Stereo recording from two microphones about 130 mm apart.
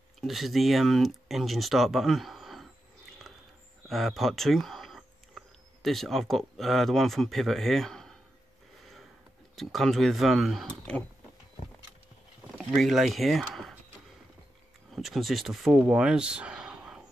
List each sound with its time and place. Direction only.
0.2 s speech: centre (ahead or behind)
3.9 s speech: centre (ahead or behind)
9.6 s speech: centre (ahead or behind)
12.5 s speech: centre (ahead or behind)
14.9 s speech: centre (ahead or behind)